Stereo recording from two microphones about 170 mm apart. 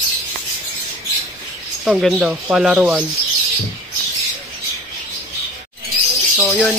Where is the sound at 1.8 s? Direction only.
5° right (ahead or behind).